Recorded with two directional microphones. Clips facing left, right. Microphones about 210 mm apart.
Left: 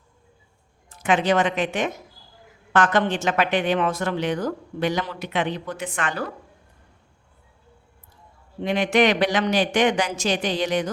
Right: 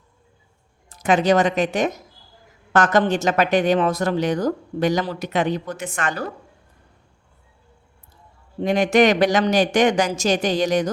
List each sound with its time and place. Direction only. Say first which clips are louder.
0.9 s speech: right 3 dB; 40° right (ahead or behind)
8.6 s speech: right 3 dB; 45° right (ahead or behind)